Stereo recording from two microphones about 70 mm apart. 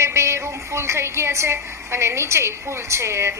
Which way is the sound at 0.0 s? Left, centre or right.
Right.